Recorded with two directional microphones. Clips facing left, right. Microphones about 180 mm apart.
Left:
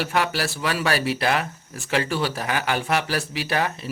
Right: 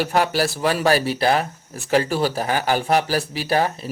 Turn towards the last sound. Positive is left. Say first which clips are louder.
# right 4 dB
turn(degrees=-35)  # may be behind; listen again after turning